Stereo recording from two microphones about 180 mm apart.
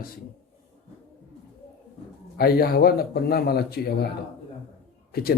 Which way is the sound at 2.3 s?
60° left (ahead or behind).